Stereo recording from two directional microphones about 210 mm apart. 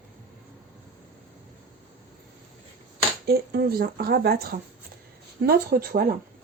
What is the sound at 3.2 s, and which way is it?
Speech, 50° right (ahead or behind).